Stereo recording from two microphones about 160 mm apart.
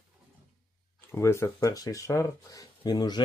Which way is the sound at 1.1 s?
15° left (ahead or behind).